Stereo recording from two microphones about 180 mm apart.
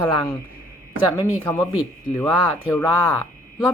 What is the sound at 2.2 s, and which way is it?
Speech, 10° left (ahead or behind).